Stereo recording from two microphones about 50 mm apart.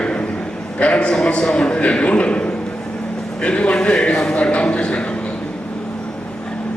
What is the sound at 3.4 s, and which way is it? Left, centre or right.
A man's voice, left.